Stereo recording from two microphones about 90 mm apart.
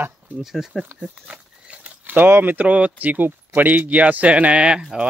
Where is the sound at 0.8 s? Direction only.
15° right (ahead or behind).